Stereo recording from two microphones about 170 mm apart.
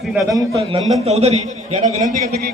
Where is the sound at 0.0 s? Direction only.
Centre (ahead or behind).